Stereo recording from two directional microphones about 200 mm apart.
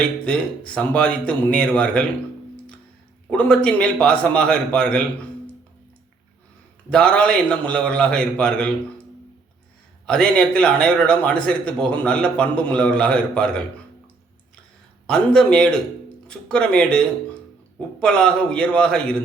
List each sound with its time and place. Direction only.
0.0 s a man's voice: 5° left (ahead or behind)
3.2 s a man's voice: 5° left (ahead or behind)
6.9 s a man's voice: 5° left (ahead or behind)
10.1 s a man's voice: 5° left (ahead or behind)
15.0 s a man's voice: 5° left (ahead or behind)